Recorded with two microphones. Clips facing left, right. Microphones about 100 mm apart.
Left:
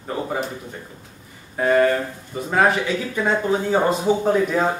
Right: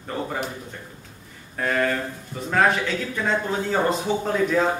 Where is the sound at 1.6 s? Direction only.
15° left (ahead or behind).